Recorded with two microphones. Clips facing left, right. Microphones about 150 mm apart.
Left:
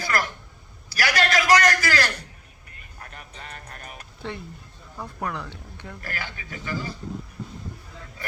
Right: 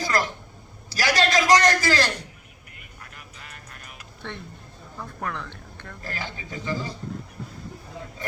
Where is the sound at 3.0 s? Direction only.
35° left (ahead or behind).